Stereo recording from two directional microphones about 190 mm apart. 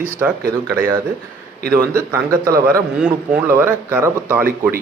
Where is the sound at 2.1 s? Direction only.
15° right (ahead or behind).